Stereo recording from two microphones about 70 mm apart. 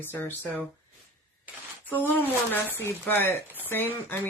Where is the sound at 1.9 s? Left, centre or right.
Left.